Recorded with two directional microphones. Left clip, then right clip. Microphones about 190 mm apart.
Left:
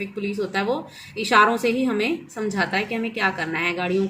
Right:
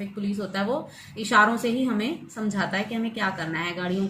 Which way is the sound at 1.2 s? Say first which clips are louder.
Left 3 dB; 40° left (ahead or behind).